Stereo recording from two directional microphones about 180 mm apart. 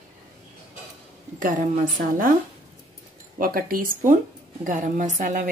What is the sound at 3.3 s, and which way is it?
Speech, 55° right (ahead or behind).